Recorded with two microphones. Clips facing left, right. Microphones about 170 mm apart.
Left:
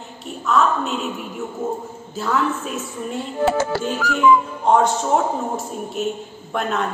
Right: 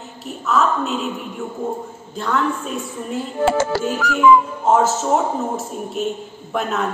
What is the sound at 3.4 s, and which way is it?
Music, 90° right.